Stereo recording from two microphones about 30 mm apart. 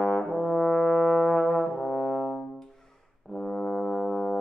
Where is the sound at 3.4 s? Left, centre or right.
Centre.